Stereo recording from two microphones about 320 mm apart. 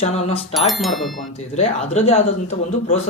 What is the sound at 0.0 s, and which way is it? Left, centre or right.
Speech, centre.